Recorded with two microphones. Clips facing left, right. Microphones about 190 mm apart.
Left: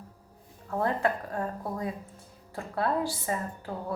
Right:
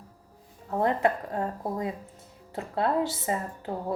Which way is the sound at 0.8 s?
20° right (ahead or behind).